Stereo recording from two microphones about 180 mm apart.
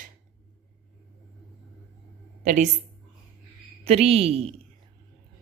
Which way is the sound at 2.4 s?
45° right (ahead or behind).